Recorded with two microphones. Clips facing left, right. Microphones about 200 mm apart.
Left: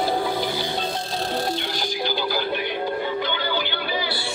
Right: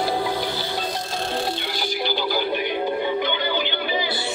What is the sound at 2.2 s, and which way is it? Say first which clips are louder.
Music: right 2 dB; 15° right (ahead or behind).